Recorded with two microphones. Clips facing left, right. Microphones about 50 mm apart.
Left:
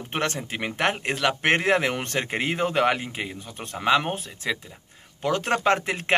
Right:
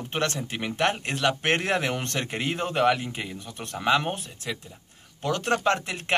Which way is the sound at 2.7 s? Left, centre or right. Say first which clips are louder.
Right 3 dB; left.